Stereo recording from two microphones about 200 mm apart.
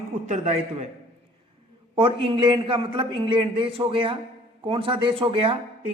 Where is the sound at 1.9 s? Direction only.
30° right (ahead or behind).